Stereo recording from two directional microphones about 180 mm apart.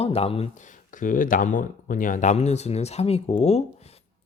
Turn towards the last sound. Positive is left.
turn(degrees=35)  # may be behind; listen again after turning